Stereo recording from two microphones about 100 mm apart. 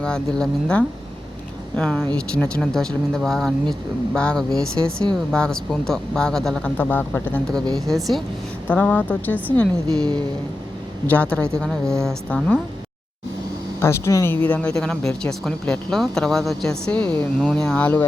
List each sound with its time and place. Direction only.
0.0 s speech: 10° left (ahead or behind)
6.7 s speech: 15° left (ahead or behind)
7.9 s speech: centre (ahead or behind)
8.6 s speech: 15° left (ahead or behind)
11.0 s speech: 15° left (ahead or behind)
13.7 s speech: 25° left (ahead or behind)
14.4 s speech: 15° left (ahead or behind)